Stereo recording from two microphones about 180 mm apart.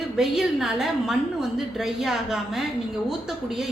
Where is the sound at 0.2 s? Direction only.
Centre (ahead or behind).